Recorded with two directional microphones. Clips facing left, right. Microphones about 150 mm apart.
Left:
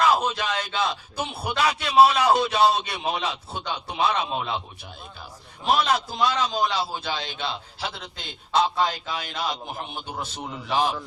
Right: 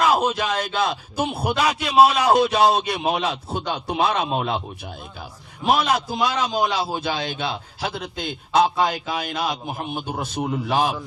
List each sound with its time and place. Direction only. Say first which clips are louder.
0.1 s a sound: right 3 dB; 10° right (ahead or behind)
0.5 s a man's voice: right 4 dB; 45° right (ahead or behind)
1.5 s a man's voice: right 1 dB; 15° right (ahead or behind)
2.2 s a man's voice: right 3 dB; 40° right (ahead or behind)
5.7 s a man's voice: right 1 dB; 15° right (ahead or behind)
6.9 s a man's voice: right 5 dB; 50° right (ahead or behind)
8.7 s a man's voice: right 3 dB; 10° right (ahead or behind)
9.9 s a man's voice: right 6 dB; 45° right (ahead or behind)